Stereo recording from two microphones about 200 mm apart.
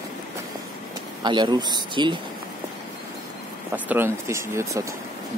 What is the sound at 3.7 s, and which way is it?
Speech, 10° right (ahead or behind).